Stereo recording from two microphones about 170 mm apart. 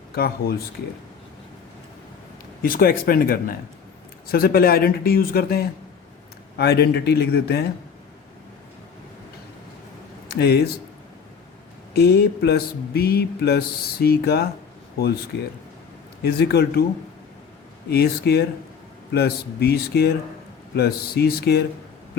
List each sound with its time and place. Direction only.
0.1 s speech: 65° left (ahead or behind)
2.6 s speech: 60° left (ahead or behind)
6.6 s mechanisms: 70° left (ahead or behind)
10.2 s a man's voice: 75° left (ahead or behind)
11.9 s mechanisms: 70° left (ahead or behind)
16.2 s mechanisms: 70° left (ahead or behind)
17.8 s mechanisms: 65° left (ahead or behind)